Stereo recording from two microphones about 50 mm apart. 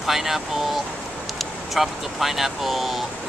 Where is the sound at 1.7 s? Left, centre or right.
Centre.